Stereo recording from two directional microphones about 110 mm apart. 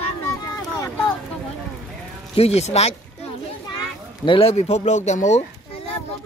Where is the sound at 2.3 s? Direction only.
70° left (ahead or behind).